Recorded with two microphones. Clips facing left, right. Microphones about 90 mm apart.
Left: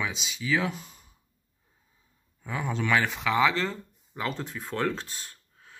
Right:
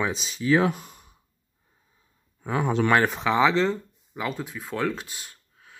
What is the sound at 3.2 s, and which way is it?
Speech, 25° right (ahead or behind).